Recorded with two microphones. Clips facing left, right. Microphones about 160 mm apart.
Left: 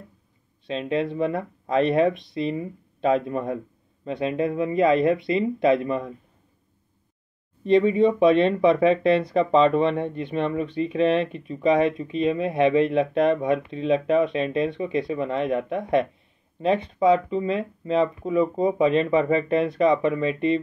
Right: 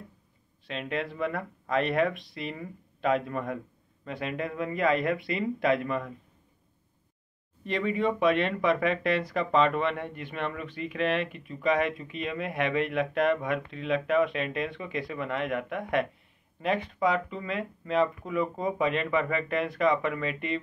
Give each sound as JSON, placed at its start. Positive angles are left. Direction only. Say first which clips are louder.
{"t": 0.7, "sound": "speech", "louder": "left 8 dB", "side_deg": 25}
{"t": 7.6, "sound": "speech", "louder": "left 10 dB", "side_deg": 25}